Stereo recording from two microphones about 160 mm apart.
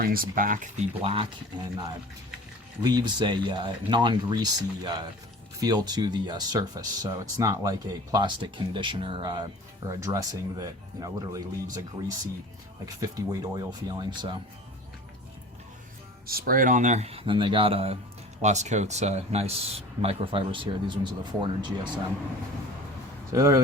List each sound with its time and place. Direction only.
0.0 s speech: 65° right (ahead or behind)
1.0 s speech: 35° right (ahead or behind)
12.8 s speech: 20° right (ahead or behind)
16.2 s speech: 65° right (ahead or behind); by 21.8 s 30° right (ahead or behind)
23.3 s speech: 20° right (ahead or behind)